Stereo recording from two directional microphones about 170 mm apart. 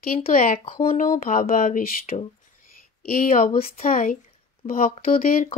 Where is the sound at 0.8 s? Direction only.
50° left (ahead or behind).